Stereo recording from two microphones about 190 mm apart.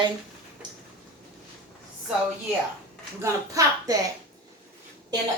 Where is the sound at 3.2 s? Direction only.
15° right (ahead or behind).